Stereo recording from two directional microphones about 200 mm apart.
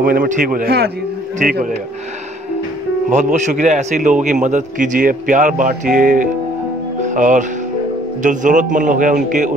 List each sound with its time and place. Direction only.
0.0 s speech: 45° right (ahead or behind)
3.1 s a man's voice: 35° right (ahead or behind)